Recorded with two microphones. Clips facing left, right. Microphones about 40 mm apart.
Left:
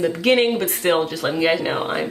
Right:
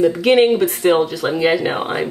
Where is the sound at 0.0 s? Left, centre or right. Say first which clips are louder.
Right 4 dB; centre.